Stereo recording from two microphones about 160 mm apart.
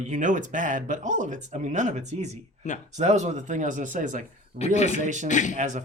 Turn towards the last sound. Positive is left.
turn(degrees=-50)  # may be behind; listen again after turning